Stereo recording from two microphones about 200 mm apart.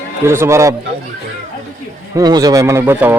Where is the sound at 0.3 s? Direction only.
15° right (ahead or behind).